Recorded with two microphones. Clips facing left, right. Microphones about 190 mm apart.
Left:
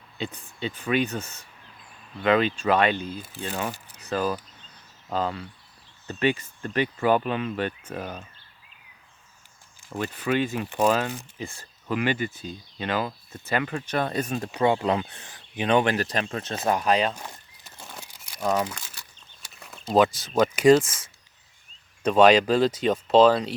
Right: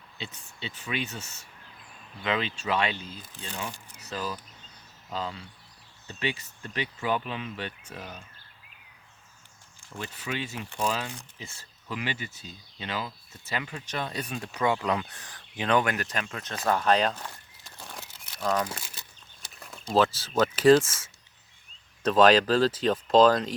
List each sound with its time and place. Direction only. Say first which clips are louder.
0.2 s speech: left 9 dB; 55° left (ahead or behind)
10.0 s speech: left 9 dB; 55° left (ahead or behind); by 15.8 s 20° left (ahead or behind)
15.8 s speech: left 5 dB; 30° left (ahead or behind)
16.8 s speech: left 1 dB; 5° left (ahead or behind)
17.6 s a sound: even; centre (ahead or behind)
18.0 s crumpling: left 3 dB; 10° left (ahead or behind)
18.7 s a sound: right 1 dB; 20° right (ahead or behind)
20.2 s speech: left 2 dB; 10° left (ahead or behind)
22.0 s speech: left 3 dB; 10° left (ahead or behind)